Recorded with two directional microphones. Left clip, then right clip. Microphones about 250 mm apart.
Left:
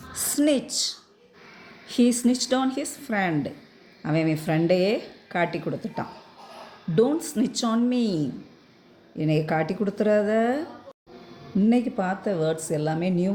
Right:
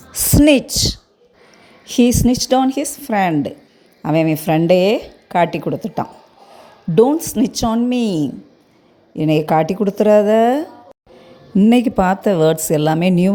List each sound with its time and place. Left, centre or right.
0.1 s a woman's voice: right